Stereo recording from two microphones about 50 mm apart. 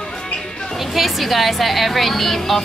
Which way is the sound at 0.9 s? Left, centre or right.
Centre.